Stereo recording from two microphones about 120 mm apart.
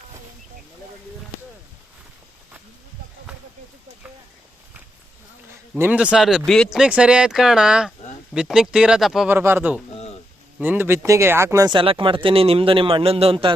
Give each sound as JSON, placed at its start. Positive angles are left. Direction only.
{"t": 5.5, "sound": "a sound", "side_deg": -20}
{"t": 6.0, "sound": "speech", "side_deg": -5}
{"t": 9.3, "sound": "speech", "side_deg": -20}
{"t": 11.7, "sound": "a man's voice", "side_deg": -45}